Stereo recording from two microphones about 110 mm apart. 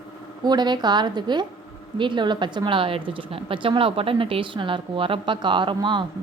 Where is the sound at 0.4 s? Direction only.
40° right (ahead or behind).